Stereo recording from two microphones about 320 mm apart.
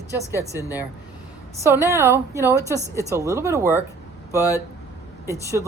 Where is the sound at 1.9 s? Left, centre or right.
Centre.